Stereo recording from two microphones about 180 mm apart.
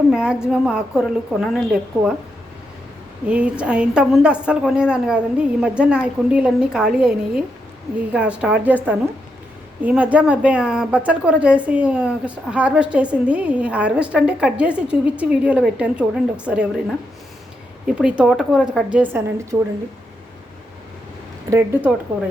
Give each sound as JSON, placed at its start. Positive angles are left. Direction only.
{"t": 0.1, "sound": "a woman's voice", "side_deg": -5}
{"t": 3.2, "sound": "a woman's voice", "side_deg": -5}
{"t": 17.8, "sound": "a woman's voice", "side_deg": -5}
{"t": 19.5, "sound": "a woman's voice", "side_deg": -20}
{"t": 21.5, "sound": "a woman's voice", "side_deg": -10}